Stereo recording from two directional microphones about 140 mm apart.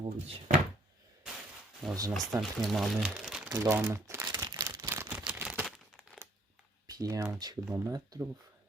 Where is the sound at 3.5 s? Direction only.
15° right (ahead or behind).